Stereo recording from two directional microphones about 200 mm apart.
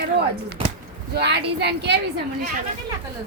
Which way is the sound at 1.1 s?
55° right (ahead or behind).